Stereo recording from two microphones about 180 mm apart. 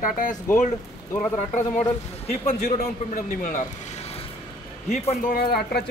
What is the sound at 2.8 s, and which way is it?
Speech, 45° left (ahead or behind).